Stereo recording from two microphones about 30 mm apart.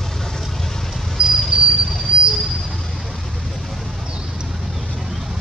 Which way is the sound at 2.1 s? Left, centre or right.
Right.